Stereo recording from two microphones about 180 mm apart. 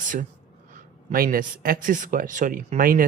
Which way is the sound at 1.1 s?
55° right (ahead or behind).